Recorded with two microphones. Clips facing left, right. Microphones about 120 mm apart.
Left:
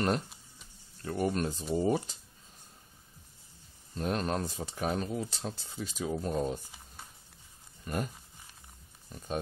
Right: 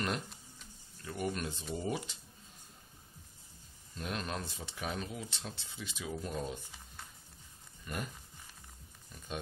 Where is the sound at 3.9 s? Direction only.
40° left (ahead or behind).